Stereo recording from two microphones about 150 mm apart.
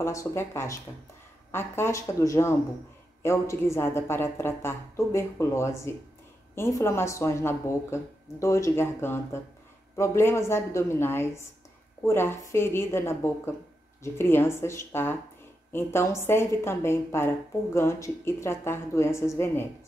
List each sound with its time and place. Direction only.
0.0 s speech: 20° left (ahead or behind)